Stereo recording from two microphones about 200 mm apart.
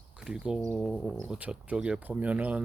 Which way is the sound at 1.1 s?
10° right (ahead or behind).